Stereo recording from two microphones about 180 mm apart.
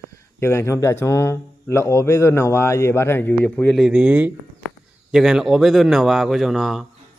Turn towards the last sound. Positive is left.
turn(degrees=0)  # may be behind; listen again after turning